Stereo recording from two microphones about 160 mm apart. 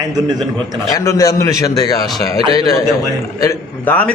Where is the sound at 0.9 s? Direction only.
20° left (ahead or behind).